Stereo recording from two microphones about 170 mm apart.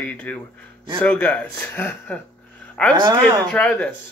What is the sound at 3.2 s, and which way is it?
Speech, 5° left (ahead or behind).